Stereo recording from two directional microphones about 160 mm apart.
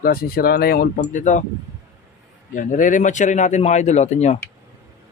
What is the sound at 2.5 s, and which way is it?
Speech, 55° left (ahead or behind).